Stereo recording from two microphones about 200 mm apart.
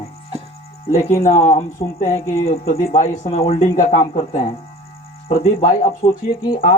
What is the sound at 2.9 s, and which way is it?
Speech, 30° left (ahead or behind).